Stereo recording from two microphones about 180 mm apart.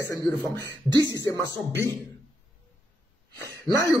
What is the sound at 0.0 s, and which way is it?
Speech, 20° left (ahead or behind).